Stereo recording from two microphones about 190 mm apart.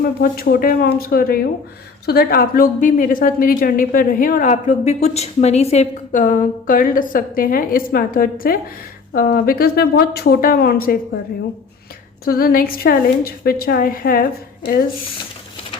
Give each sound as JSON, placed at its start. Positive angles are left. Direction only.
{"t": 0.0, "sound": "a woman's voice", "side_deg": 50}
{"t": 12.2, "sound": "a woman's voice", "side_deg": 50}